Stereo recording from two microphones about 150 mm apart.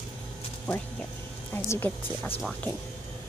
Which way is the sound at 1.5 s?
15° left (ahead or behind).